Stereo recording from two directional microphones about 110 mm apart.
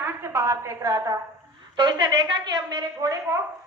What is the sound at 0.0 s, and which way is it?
A woman's voice, 25° right (ahead or behind).